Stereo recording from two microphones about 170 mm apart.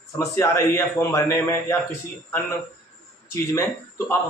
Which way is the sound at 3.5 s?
15° left (ahead or behind).